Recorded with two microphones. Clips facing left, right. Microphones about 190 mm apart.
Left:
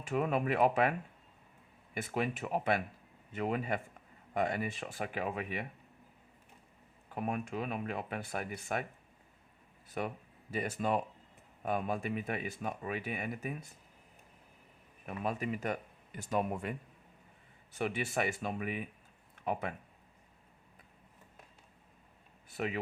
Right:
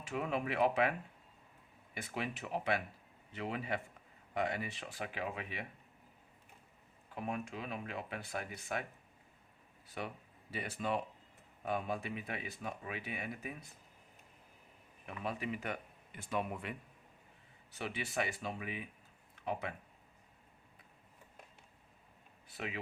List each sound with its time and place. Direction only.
0.0 s speech: 50° left (ahead or behind)
2.0 s speech: 50° left (ahead or behind)
7.1 s speech: 55° left (ahead or behind)
10.0 s speech: 45° left (ahead or behind)
15.0 s speech: 45° left (ahead or behind)
22.4 s speech: 50° left (ahead or behind)